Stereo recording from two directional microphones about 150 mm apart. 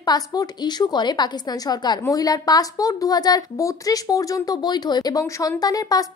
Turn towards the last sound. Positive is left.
turn(degrees=25)  # may be behind; listen again after turning